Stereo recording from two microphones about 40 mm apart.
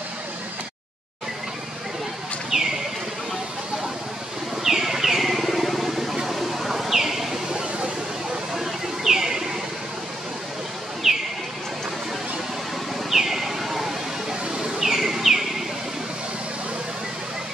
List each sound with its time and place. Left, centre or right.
2.5 s bird: centre
4.6 s bird: centre
8.5 s bird: centre
11.0 s bird: centre
13.1 s a sound: centre
14.6 s bird: centre